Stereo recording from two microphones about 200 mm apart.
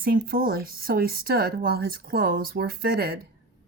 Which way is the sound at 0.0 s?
50° right (ahead or behind).